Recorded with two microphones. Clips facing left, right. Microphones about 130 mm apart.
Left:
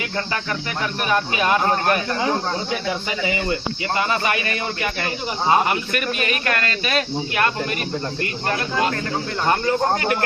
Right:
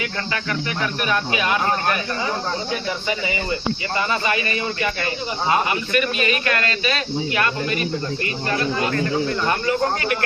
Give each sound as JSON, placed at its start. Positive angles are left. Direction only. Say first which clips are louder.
{"t": 5.6, "sound": "speech", "louder": "right 1 dB", "side_deg": 50}
{"t": 9.5, "sound": "speech", "louder": "left 6 dB", "side_deg": 40}